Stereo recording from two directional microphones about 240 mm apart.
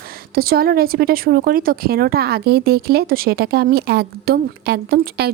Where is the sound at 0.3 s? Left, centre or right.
Right.